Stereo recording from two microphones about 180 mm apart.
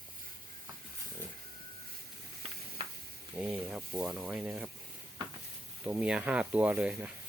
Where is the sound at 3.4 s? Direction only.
5° right (ahead or behind).